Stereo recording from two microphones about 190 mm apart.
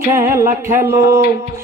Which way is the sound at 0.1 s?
15° right (ahead or behind).